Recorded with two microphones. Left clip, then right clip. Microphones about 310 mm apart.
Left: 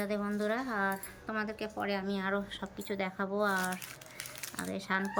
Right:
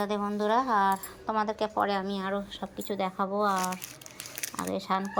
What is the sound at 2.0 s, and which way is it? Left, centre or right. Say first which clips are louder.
Speech: right 2 dB; centre.